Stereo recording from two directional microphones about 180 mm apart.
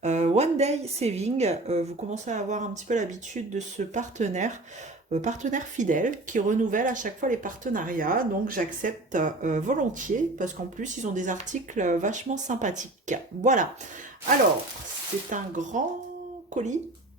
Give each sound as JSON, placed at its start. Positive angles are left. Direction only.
{"t": 0.0, "sound": "a woman's voice", "side_deg": -40}
{"t": 15.3, "sound": "speech", "side_deg": -45}